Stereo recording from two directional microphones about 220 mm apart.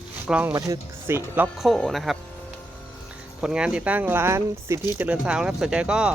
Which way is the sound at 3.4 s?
5° right (ahead or behind).